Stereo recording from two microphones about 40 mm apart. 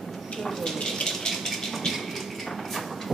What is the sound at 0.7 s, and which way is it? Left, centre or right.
Water tap, centre.